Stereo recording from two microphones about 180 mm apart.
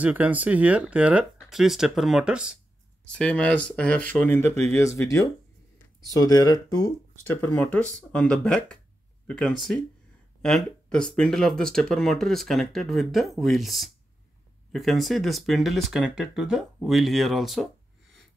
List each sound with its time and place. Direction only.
0.0 s speech: 10° right (ahead or behind)
3.1 s speech: 5° left (ahead or behind); by 6.9 s 20° left (ahead or behind)
7.2 s speech: 10° left (ahead or behind)